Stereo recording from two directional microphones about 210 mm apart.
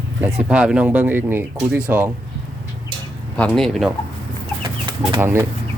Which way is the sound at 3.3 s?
5° left (ahead or behind).